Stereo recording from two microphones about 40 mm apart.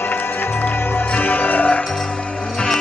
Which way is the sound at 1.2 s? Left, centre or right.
Left.